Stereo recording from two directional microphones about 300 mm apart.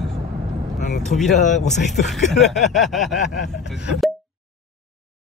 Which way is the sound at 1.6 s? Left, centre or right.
Centre.